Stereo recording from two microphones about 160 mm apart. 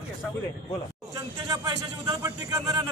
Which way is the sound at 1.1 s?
25° right (ahead or behind).